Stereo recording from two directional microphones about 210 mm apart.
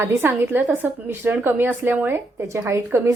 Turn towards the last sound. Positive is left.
turn(degrees=-10)  # may be behind; listen again after turning